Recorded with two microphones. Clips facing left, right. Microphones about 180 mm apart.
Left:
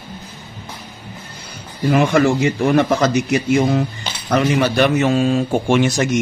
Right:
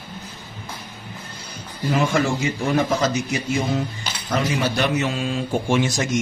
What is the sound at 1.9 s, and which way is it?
A man's voice, 70° left (ahead or behind).